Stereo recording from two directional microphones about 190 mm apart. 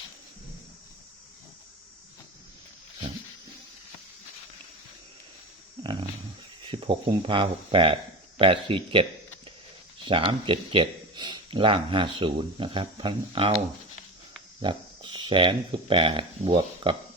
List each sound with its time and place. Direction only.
5.8 s dog: 25° right (ahead or behind)
6.7 s speech: 25° right (ahead or behind)
10.1 s speech: 25° right (ahead or behind)
14.6 s speech: 25° right (ahead or behind)